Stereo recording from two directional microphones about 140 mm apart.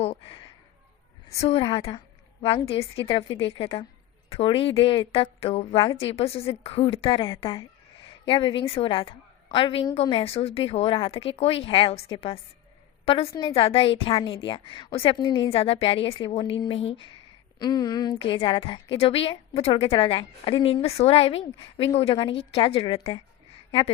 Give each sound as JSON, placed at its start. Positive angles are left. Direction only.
{"t": 0.0, "sound": "a sound", "side_deg": 45}
{"t": 1.4, "sound": "a woman's voice", "side_deg": 45}
{"t": 17.6, "sound": "a woman's voice", "side_deg": 30}